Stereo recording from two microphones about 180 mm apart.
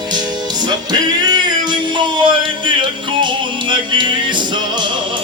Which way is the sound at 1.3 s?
25° right (ahead or behind).